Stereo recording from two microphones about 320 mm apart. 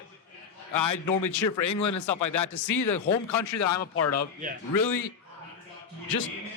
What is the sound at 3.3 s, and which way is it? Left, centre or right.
Speech, left.